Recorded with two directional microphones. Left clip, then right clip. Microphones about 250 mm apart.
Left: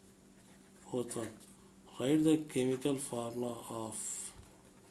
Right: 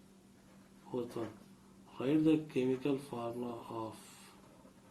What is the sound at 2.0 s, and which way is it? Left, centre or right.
Speech, left.